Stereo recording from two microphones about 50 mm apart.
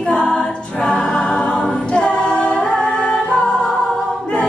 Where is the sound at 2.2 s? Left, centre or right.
Left.